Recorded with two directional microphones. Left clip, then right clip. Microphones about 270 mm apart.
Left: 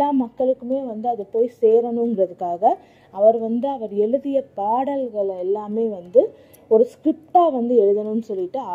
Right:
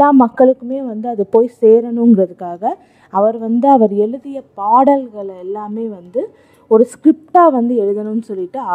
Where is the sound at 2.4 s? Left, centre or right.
Right.